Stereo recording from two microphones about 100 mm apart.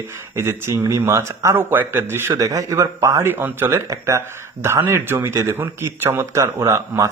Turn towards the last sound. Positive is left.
turn(degrees=-30)  # may be behind; listen again after turning